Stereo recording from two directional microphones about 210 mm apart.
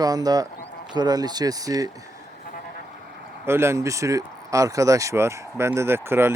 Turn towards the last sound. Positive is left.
turn(degrees=-10)  # may be behind; listen again after turning